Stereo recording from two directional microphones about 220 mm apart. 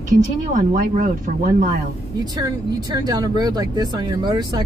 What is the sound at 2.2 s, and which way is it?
Speech, 15° right (ahead or behind).